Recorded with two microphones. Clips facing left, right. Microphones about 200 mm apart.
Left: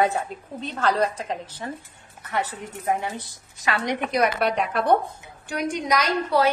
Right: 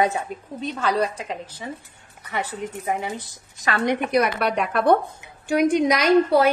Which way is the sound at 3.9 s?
60° right (ahead or behind).